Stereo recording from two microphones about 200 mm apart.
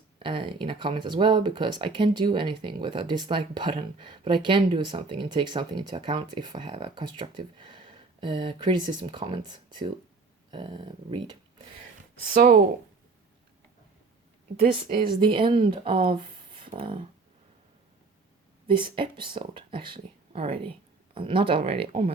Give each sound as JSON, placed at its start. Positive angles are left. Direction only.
{"t": 0.2, "sound": "speech", "side_deg": -25}
{"t": 12.3, "sound": "speech", "side_deg": -45}
{"t": 14.8, "sound": "speech", "side_deg": -45}
{"t": 15.1, "sound": "speech", "side_deg": -25}
{"t": 18.8, "sound": "speech", "side_deg": -25}